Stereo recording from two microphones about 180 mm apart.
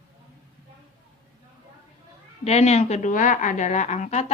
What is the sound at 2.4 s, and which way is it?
A woman's voice, 35° left (ahead or behind).